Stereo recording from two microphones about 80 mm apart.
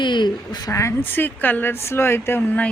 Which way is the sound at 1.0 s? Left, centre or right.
Left.